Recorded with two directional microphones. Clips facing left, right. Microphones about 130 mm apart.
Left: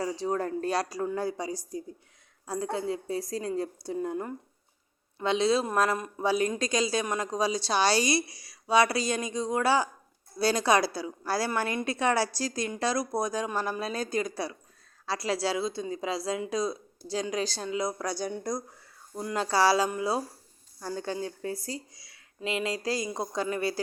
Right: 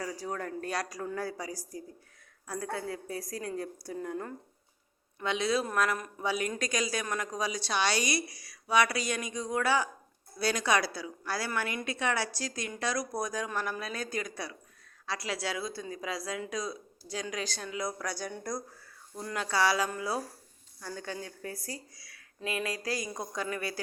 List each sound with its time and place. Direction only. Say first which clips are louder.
0.0 s a woman's voice: left 7 dB; 25° left (ahead or behind)
5.2 s a woman's voice: left 5 dB; 30° left (ahead or behind)
19.4 s a woman's voice: left 4 dB; 35° left (ahead or behind)